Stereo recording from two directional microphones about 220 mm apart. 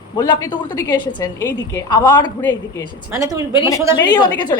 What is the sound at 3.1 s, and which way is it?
Speech, 15° right (ahead or behind).